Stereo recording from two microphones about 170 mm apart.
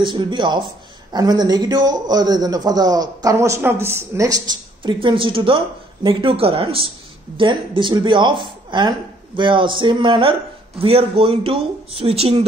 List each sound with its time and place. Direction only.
0.0 s a man's voice: 30° right (ahead or behind)